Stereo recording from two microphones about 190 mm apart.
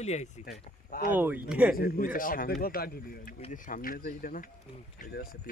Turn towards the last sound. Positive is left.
turn(degrees=40)  # may be behind; listen again after turning